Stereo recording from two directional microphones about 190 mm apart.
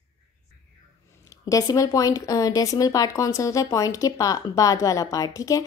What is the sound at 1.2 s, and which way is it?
Speech, 15° left (ahead or behind).